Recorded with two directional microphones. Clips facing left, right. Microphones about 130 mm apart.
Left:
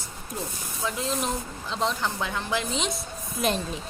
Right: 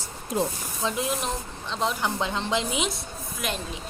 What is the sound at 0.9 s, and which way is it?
Speech, 20° right (ahead or behind).